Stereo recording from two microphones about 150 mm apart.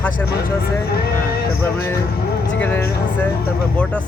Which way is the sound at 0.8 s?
90° left.